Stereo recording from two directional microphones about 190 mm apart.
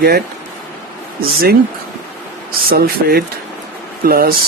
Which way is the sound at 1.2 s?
50° right (ahead or behind).